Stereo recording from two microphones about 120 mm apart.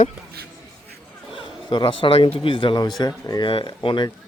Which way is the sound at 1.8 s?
50° left (ahead or behind).